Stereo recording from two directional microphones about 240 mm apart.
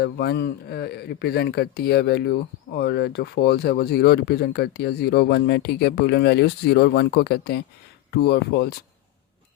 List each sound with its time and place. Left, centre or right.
0.0 s speech: left